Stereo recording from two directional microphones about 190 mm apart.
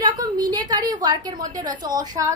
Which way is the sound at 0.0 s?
20° right (ahead or behind).